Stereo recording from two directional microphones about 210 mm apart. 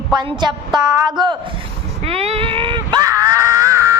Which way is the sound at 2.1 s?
30° right (ahead or behind).